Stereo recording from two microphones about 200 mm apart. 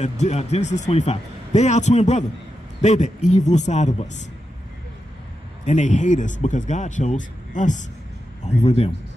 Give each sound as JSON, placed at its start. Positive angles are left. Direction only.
{"t": 0.0, "sound": "a man's voice", "side_deg": 35}
{"t": 5.7, "sound": "a man's voice", "side_deg": 40}